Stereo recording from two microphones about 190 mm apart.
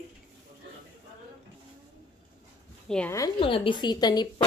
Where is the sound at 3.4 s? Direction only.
30° left (ahead or behind).